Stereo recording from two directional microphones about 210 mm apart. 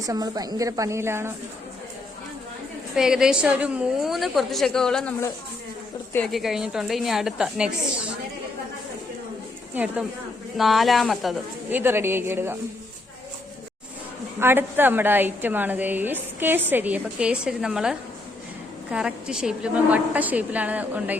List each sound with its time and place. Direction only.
0.0 s a woman's voice: 15° right (ahead or behind)
2.9 s a woman's voice: 5° right (ahead or behind)
9.7 s a woman's voice: 5° right (ahead or behind)
14.3 s a woman's voice: 10° right (ahead or behind)